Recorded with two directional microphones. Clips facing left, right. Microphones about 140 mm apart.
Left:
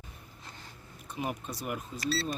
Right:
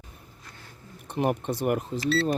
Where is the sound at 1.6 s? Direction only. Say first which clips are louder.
Right 10 dB; 60° right (ahead or behind).